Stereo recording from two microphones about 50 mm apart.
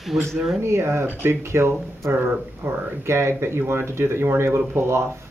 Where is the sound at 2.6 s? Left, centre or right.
Right.